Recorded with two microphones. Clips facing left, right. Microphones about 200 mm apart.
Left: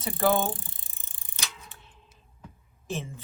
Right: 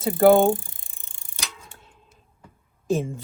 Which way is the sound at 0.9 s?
15° left (ahead or behind).